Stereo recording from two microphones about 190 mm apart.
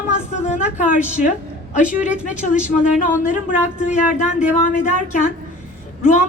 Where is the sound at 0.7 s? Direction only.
40° left (ahead or behind).